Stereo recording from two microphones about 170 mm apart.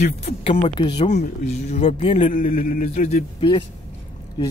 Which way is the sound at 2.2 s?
55° left (ahead or behind).